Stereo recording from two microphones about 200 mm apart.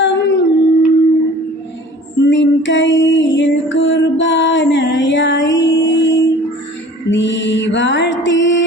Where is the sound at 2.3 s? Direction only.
65° left (ahead or behind).